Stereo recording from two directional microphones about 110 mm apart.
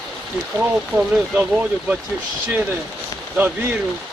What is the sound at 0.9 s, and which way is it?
Speech, 10° right (ahead or behind).